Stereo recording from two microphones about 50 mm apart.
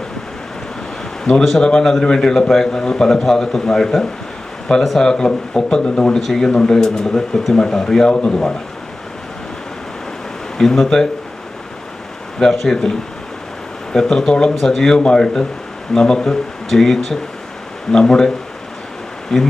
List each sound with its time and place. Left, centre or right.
1.2 s a man's voice: centre
5.0 s a man's voice: centre
10.6 s a man's voice: centre
12.4 s a man's voice: centre
13.9 s a man's voice: centre
14.5 s a man's voice: centre
19.3 s a man's voice: centre